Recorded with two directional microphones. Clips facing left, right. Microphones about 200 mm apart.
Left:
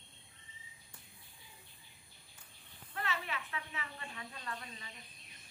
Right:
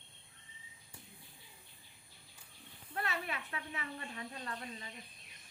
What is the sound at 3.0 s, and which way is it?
Speech, 40° right (ahead or behind).